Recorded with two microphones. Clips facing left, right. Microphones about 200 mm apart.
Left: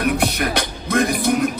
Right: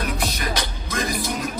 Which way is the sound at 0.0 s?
60° left (ahead or behind).